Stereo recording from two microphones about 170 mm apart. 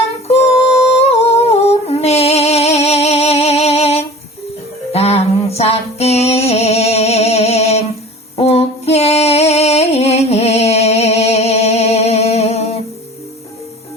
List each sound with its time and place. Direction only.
0.3 s humming: 35° left (ahead or behind)
4.9 s music: 40° left (ahead or behind)
8.4 s female singing: 35° left (ahead or behind)